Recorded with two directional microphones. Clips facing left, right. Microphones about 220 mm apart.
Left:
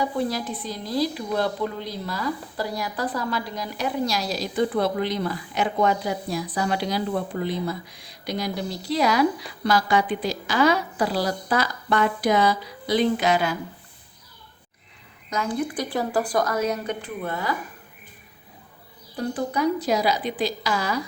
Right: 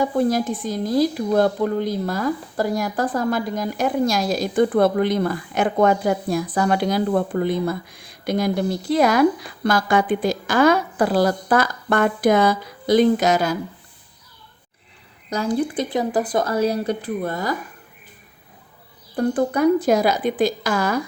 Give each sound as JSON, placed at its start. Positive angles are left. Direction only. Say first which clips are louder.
{"t": 0.0, "sound": "a woman's voice", "louder": "right 6 dB", "side_deg": -50}
{"t": 15.3, "sound": "speech", "louder": "right 5 dB", "side_deg": -35}
{"t": 19.1, "sound": "a woman's voice", "louder": "right 6 dB", "side_deg": -50}